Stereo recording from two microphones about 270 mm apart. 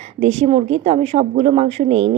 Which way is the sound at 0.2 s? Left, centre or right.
Right.